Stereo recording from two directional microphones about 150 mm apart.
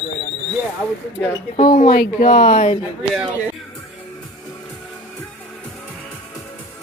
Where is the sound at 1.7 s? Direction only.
65° left (ahead or behind).